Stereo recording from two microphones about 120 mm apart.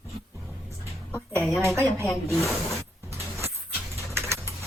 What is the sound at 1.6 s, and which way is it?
Speech, 25° right (ahead or behind).